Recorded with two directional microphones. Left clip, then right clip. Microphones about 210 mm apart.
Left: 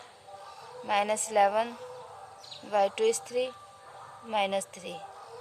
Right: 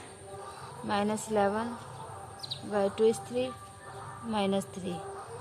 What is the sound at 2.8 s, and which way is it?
Speech, 55° left (ahead or behind).